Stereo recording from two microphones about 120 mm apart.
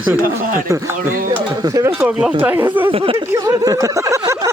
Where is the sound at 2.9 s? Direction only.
45° right (ahead or behind).